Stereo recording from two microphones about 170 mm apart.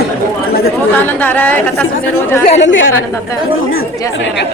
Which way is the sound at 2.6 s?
90° left.